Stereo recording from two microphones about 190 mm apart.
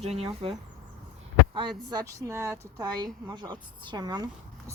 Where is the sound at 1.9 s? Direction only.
20° right (ahead or behind).